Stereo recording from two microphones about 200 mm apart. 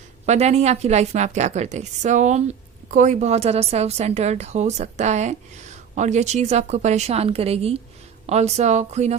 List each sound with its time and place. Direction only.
0.3 s a woman's voice: 35° right (ahead or behind)